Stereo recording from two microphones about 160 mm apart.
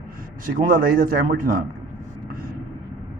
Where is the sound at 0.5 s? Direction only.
65° right (ahead or behind).